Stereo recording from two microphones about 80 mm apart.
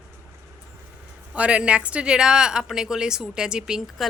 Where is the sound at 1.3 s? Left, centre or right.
Centre.